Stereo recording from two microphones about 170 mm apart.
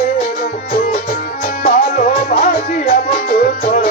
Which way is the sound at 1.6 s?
50° left (ahead or behind).